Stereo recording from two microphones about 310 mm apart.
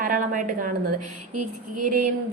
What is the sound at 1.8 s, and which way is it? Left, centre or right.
Speech, right.